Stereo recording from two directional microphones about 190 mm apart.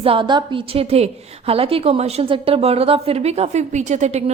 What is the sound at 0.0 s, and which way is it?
A woman's voice, 30° right (ahead or behind).